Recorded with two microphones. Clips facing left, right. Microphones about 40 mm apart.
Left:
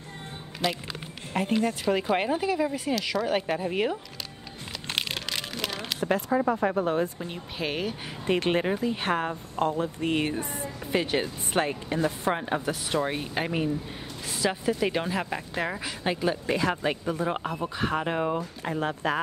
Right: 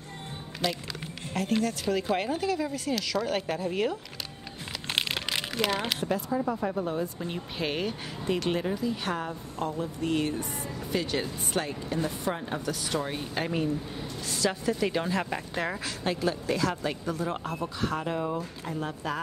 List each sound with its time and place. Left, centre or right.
0.6 s speech: centre
1.6 s speech: left
4.9 s a sound: centre
6.3 s speech: left
7.2 s speech: centre
8.3 s a woman's voice: left; by 15.1 s centre
15.1 s speech: centre; by 18.0 s left
18.0 s a woman's voice: left